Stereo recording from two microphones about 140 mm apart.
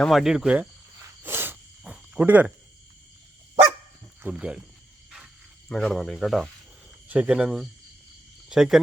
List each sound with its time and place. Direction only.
0.0 s speech: centre (ahead or behind)
0.9 s cricket: 15° right (ahead or behind)
4.2 s speech: 10° right (ahead or behind)
5.6 s speech: 5° left (ahead or behind)